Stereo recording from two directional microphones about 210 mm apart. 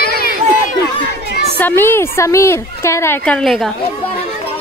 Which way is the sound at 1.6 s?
10° left (ahead or behind).